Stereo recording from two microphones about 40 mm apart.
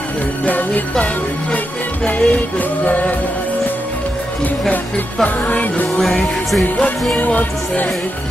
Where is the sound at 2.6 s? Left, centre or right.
Left.